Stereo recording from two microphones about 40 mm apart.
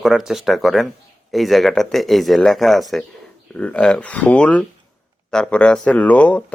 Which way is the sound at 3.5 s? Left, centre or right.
Left.